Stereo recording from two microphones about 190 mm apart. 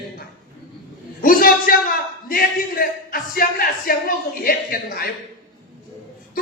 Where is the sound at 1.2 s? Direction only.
50° left (ahead or behind).